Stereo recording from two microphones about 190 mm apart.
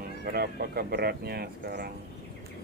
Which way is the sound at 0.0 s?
50° right (ahead or behind).